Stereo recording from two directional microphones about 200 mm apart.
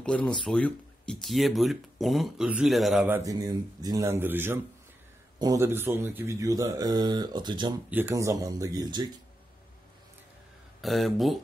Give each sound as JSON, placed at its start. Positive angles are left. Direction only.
{"t": 0.0, "sound": "speech", "side_deg": 5}
{"t": 3.2, "sound": "speech", "side_deg": -20}
{"t": 10.8, "sound": "speech", "side_deg": 0}